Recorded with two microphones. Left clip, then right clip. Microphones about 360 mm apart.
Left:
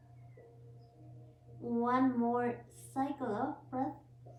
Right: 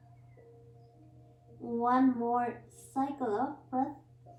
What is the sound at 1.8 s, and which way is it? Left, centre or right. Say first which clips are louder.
Speech: right 4 dB; centre.